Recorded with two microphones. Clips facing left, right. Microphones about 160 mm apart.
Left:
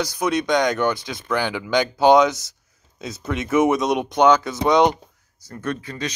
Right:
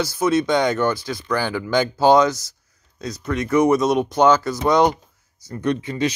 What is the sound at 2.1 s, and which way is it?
Speech, centre (ahead or behind).